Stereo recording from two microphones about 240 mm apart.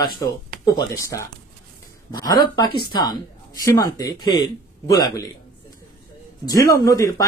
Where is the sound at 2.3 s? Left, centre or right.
Centre.